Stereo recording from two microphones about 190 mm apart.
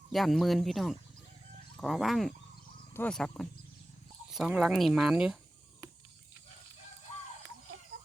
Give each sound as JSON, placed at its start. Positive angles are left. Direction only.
{"t": 0.1, "sound": "speech", "side_deg": 0}